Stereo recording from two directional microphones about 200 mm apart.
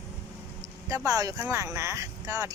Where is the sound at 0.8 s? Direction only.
15° right (ahead or behind).